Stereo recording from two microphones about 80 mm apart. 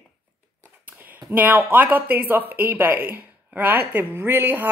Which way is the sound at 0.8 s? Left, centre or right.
Right.